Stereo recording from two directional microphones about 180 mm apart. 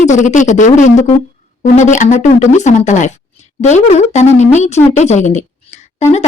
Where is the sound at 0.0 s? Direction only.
40° left (ahead or behind).